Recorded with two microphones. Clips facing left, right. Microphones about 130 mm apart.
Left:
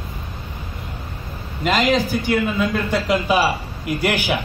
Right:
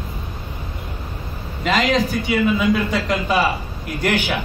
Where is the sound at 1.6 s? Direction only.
Centre (ahead or behind).